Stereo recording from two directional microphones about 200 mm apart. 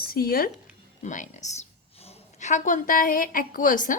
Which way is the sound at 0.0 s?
45° left (ahead or behind).